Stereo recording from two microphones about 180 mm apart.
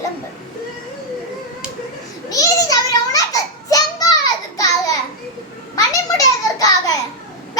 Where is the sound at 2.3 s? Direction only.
20° left (ahead or behind).